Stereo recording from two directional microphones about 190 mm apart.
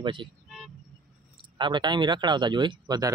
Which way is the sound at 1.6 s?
25° right (ahead or behind).